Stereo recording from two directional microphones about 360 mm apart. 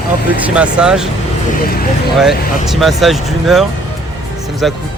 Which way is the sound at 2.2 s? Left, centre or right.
Centre.